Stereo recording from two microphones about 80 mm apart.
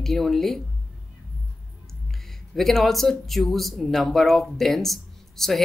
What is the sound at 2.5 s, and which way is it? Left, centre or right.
Speech, centre.